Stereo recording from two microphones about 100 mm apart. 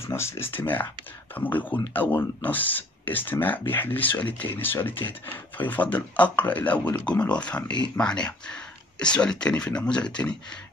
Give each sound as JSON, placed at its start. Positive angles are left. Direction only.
{"t": 0.0, "sound": "speech", "side_deg": 25}